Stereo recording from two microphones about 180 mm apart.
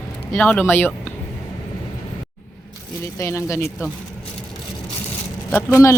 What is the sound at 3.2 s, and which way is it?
Speech, 15° left (ahead or behind).